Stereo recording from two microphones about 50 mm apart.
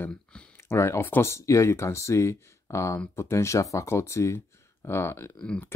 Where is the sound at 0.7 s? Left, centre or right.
Left.